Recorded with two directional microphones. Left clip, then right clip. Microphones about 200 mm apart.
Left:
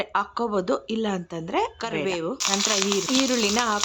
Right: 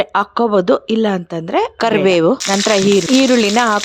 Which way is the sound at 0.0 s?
30° right (ahead or behind).